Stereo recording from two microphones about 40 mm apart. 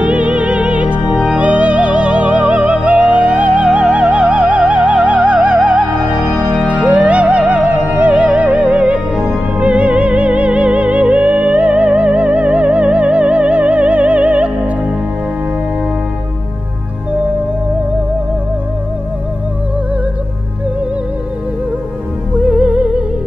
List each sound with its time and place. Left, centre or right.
0.0 s music: right
22.4 s music: right